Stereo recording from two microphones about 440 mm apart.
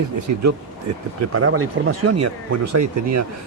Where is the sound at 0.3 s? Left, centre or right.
Right.